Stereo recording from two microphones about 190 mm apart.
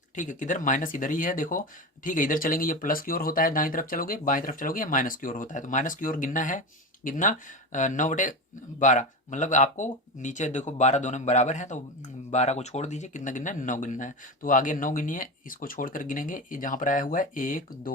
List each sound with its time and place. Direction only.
0.2 s speech: 40° left (ahead or behind)